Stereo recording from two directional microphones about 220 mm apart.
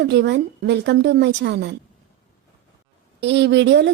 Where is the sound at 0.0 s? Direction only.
50° right (ahead or behind).